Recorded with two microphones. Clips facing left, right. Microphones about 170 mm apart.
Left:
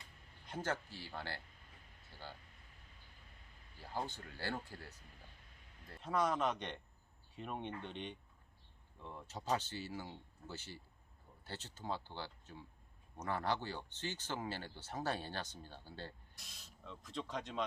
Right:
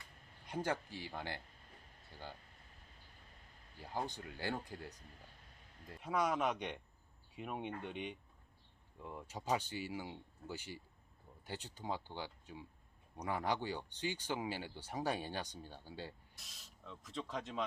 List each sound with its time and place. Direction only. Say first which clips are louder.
0.4 s speech: right 2 dB; 10° right (ahead or behind)
3.9 s speech: right 1 dB; 15° right (ahead or behind)
16.3 s speech: left 1 dB; centre (ahead or behind)